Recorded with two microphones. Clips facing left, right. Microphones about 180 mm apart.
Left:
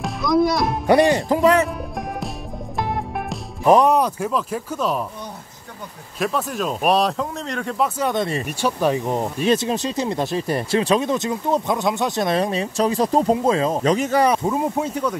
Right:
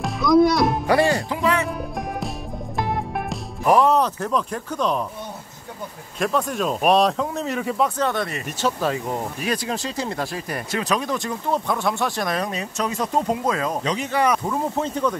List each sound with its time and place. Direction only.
0.0 s music: centre (ahead or behind)
0.8 s music: 20° left (ahead or behind)
1.3 s music: 40° left (ahead or behind)
2.8 s music: centre (ahead or behind)
3.6 s speech: 20° left (ahead or behind)
6.1 s speech: centre (ahead or behind)
8.1 s speech: 25° left (ahead or behind)
8.5 s speech: 10° left (ahead or behind)
13.8 s speech: 45° left (ahead or behind)
14.2 s speech: 25° left (ahead or behind); by 15.1 s 10° left (ahead or behind)